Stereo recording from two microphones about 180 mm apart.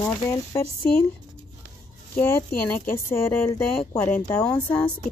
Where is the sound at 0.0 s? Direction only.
15° left (ahead or behind).